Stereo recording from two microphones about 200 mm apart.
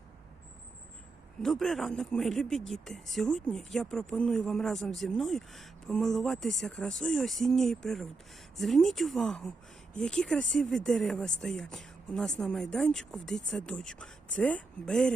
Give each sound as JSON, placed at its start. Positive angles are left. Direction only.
{"t": 1.4, "sound": "speech", "side_deg": 0}